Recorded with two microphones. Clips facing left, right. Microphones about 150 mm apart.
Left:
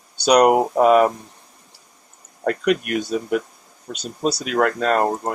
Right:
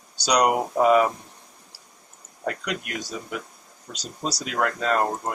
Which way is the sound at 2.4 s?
60° left (ahead or behind).